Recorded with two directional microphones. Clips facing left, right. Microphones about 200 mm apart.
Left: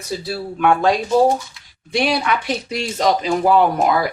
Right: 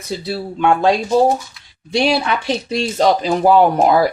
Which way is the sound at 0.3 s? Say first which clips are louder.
Right 1 dB; 25° right (ahead or behind).